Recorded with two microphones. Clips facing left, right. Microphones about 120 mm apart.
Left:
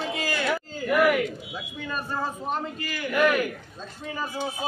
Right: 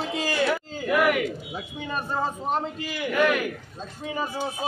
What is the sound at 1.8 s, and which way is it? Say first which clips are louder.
A man's voice: right 2 dB; 20° right (ahead or behind).